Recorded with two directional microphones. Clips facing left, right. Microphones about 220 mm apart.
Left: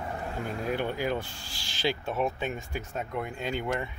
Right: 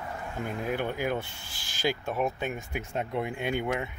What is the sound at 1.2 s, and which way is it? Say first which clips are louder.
Speech: left 1 dB; 55° right (ahead or behind).